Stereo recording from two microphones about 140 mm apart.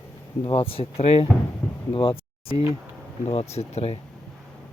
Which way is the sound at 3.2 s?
50° left (ahead or behind).